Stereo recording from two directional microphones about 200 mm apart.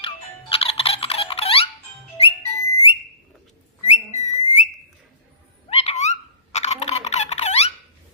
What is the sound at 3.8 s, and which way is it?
Whistling, 35° left (ahead or behind).